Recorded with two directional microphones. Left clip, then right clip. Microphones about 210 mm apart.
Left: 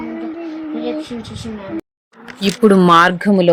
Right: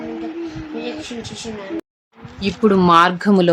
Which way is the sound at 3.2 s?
Centre (ahead or behind).